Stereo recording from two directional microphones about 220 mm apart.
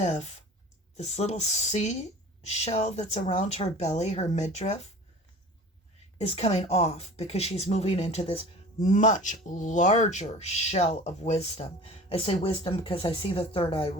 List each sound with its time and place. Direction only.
0.0 s speech: 30° left (ahead or behind)
6.1 s speech: 30° left (ahead or behind)